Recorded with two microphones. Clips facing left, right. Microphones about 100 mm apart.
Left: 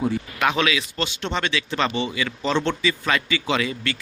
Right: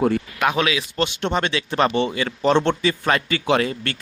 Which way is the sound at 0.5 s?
30° right (ahead or behind).